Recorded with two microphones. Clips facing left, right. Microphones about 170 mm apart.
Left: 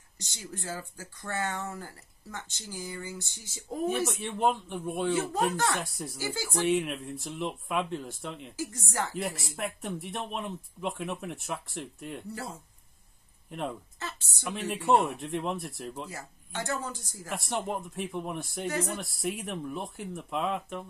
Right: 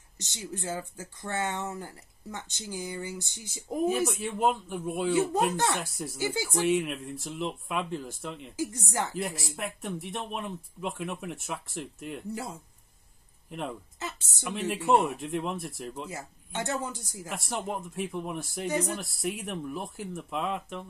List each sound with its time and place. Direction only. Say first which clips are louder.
0.2 s speech: right 4 dB; 20° right (ahead or behind)
3.8 s speech: right 2 dB; centre (ahead or behind)
6.1 s speech: right 4 dB; 20° right (ahead or behind)
6.5 s speech: left 1 dB; centre (ahead or behind)
13.5 s speech: left 1 dB; centre (ahead or behind)
13.9 s a woman's voice: right 2 dB; 20° right (ahead or behind)
14.4 s speech: right 2 dB; centre (ahead or behind)
16.1 s speech: right 3 dB; 20° right (ahead or behind)
17.3 s speech: left 1 dB; centre (ahead or behind)